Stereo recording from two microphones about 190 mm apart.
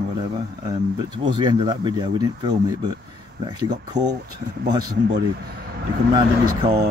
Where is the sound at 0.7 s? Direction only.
25° right (ahead or behind).